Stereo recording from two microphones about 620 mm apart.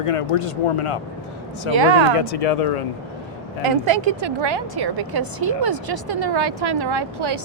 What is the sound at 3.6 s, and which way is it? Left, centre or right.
A woman's voice, right.